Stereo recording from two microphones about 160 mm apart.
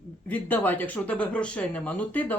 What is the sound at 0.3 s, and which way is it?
Speech, 10° left (ahead or behind).